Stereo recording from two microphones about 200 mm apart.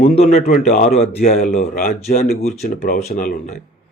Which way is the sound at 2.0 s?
35° left (ahead or behind).